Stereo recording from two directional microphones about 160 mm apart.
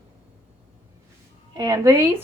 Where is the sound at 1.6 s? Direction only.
20° right (ahead or behind).